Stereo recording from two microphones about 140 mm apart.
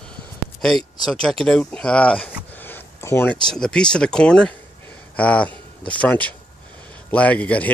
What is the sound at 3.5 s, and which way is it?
A man's voice, 5° left (ahead or behind).